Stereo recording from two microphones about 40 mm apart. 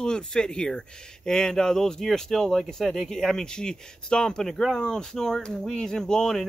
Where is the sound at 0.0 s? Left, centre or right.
Centre.